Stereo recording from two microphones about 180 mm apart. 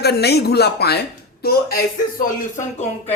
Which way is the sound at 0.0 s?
65° left (ahead or behind).